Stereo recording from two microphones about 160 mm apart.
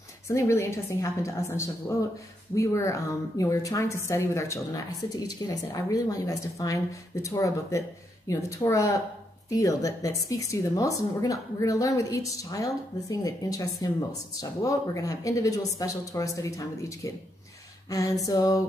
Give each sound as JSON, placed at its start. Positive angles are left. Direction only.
{"t": 0.3, "sound": "a woman's voice", "side_deg": 20}